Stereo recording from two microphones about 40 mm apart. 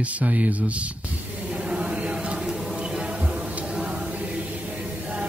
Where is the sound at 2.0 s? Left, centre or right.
Right.